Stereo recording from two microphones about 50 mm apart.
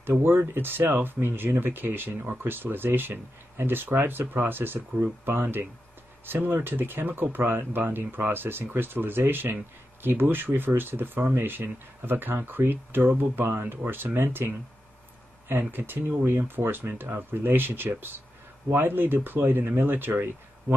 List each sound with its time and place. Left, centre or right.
0.0 s speech: right
15.7 s speech: right